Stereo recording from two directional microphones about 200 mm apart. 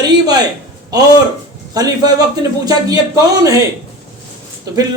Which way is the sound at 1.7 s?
20° right (ahead or behind).